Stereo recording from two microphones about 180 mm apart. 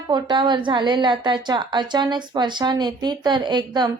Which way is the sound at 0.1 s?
25° right (ahead or behind).